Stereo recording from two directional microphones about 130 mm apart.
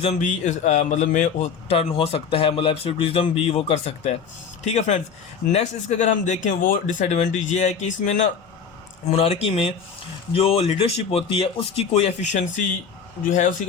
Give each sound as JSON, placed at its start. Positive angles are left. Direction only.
{"t": 0.0, "sound": "speech", "side_deg": 65}
{"t": 1.7, "sound": "speech", "side_deg": 45}
{"t": 9.0, "sound": "speech", "side_deg": 50}